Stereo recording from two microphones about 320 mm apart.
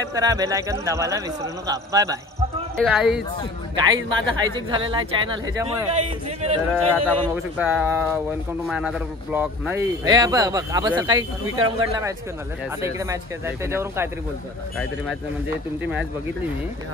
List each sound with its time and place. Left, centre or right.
0.1 s speech: centre
3.7 s speech: centre
6.7 s speech: centre
11.4 s speech: right
12.8 s speech: centre